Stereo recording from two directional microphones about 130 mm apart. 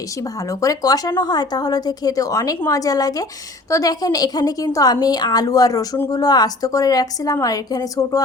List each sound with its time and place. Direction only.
0.6 s a woman's voice: 25° left (ahead or behind)